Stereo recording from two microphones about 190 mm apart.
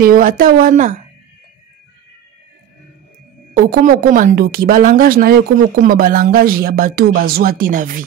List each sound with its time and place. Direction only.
0.0 s speech: 45° right (ahead or behind)
3.5 s speech: 50° right (ahead or behind)